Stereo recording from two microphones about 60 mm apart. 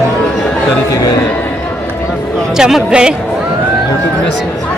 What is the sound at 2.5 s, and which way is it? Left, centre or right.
Speech, centre.